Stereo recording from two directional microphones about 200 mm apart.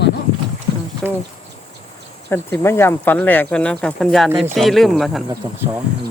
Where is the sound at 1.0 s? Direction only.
5° left (ahead or behind).